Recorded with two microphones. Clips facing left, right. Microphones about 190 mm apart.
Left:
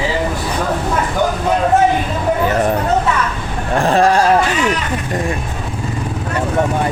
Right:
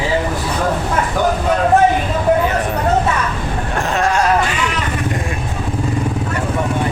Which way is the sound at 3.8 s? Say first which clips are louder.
Left 5 dB; 35° left (ahead or behind).